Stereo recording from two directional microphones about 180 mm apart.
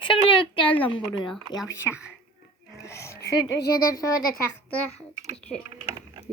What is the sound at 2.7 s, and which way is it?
Music, 15° left (ahead or behind).